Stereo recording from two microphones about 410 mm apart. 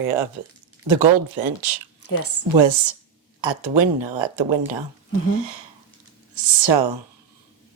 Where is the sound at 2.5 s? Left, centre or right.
Right.